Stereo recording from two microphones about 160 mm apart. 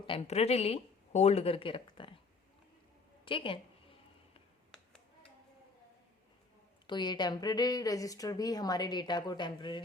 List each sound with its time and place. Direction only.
0.0 s a woman's voice: 35° left (ahead or behind)
3.2 s a woman's voice: 35° left (ahead or behind)
6.8 s a woman's voice: 30° left (ahead or behind)